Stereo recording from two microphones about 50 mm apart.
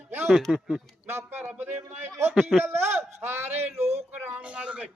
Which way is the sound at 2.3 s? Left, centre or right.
Centre.